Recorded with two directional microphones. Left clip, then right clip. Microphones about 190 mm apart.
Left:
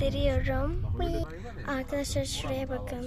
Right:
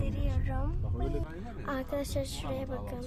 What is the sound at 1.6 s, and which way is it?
Speech, 10° left (ahead or behind).